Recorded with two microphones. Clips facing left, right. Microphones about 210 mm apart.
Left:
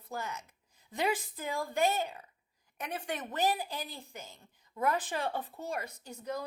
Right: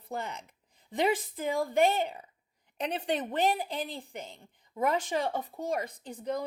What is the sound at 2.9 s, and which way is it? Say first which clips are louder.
Speech: right 6 dB; 30° right (ahead or behind).